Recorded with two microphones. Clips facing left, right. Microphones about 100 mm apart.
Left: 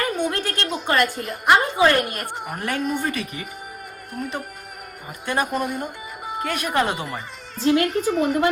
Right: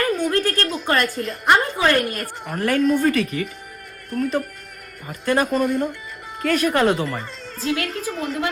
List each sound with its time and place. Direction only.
0.0 s a sound: 20° left (ahead or behind)
0.6 s a woman's voice: 20° left (ahead or behind)
8.0 s a woman's voice: 5° left (ahead or behind)